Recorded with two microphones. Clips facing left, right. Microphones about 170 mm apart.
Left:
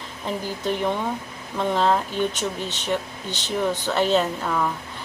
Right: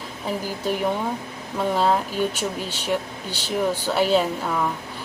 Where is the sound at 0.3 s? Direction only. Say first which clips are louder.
Even; 10° right (ahead or behind).